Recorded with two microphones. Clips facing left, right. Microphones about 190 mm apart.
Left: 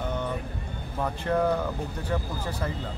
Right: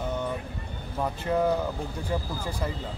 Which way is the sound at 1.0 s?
10° right (ahead or behind).